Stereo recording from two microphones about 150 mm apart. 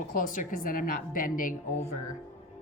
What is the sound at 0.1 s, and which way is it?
A woman's voice, 65° left (ahead or behind).